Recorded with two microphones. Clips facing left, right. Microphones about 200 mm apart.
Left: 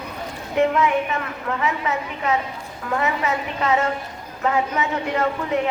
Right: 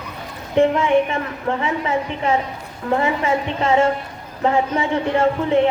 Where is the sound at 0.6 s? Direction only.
30° right (ahead or behind).